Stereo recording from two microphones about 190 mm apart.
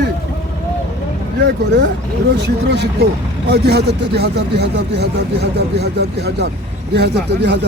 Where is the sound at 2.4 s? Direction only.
60° right (ahead or behind).